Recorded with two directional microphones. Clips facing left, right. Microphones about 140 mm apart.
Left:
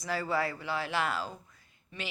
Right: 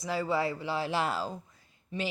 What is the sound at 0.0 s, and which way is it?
Speech, 25° right (ahead or behind).